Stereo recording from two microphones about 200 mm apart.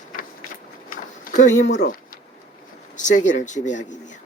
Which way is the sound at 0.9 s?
45° left (ahead or behind).